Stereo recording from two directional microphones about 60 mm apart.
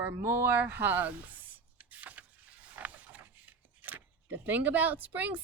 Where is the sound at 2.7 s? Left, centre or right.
Right.